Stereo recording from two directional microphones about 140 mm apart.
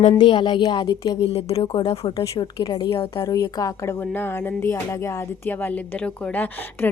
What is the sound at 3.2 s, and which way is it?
Speech, 25° left (ahead or behind).